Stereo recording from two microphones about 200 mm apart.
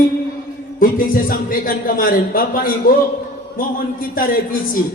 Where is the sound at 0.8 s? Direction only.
45° left (ahead or behind).